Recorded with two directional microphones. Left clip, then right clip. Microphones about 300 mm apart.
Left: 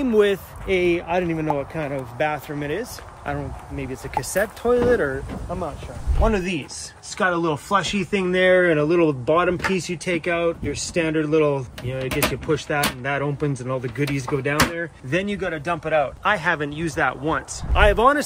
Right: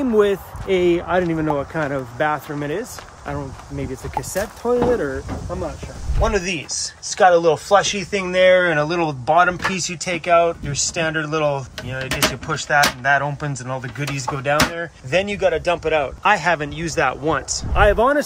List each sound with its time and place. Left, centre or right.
0.0 s speech: centre
6.2 s speech: centre
14.4 s speech: right
15.0 s speech: centre